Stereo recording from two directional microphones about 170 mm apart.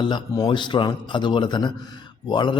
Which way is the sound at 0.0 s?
25° left (ahead or behind).